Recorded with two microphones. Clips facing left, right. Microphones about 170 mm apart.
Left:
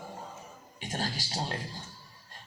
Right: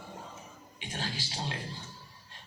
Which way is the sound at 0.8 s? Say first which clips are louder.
Left 3 dB; 40° left (ahead or behind).